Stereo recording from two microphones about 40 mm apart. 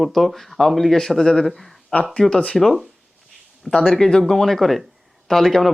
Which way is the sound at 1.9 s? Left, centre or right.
Left.